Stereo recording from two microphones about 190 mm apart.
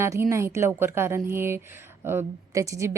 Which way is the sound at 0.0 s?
15° right (ahead or behind).